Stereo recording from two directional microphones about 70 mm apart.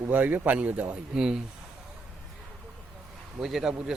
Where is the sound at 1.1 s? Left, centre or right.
Centre.